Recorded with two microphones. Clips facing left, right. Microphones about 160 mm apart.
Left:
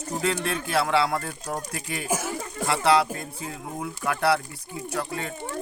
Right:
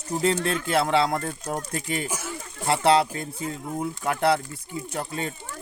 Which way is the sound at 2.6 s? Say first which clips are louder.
Right 1 dB; 25° right (ahead or behind).